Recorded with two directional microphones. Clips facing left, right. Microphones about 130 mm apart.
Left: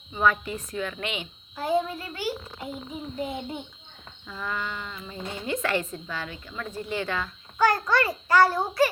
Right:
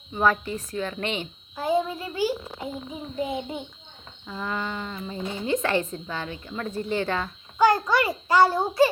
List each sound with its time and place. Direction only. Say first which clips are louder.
0.2 s a woman's voice: right 1 dB; 35° right (ahead or behind)
1.5 s a child's voice: right 1 dB; 15° right (ahead or behind)
7.6 s a child's voice: right 2 dB; 15° right (ahead or behind)